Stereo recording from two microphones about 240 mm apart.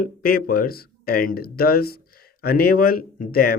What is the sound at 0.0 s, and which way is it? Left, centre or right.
A man's voice, left.